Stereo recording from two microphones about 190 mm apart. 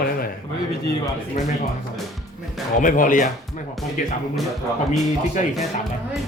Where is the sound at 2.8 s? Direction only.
45° left (ahead or behind).